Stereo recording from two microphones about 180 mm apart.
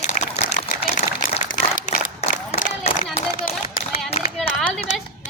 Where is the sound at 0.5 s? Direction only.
45° left (ahead or behind).